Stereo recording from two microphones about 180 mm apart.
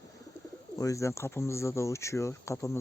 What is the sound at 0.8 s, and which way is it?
Speech, 15° left (ahead or behind).